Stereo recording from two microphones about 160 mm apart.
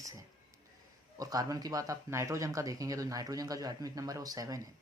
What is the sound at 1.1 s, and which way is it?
Speech, 20° right (ahead or behind).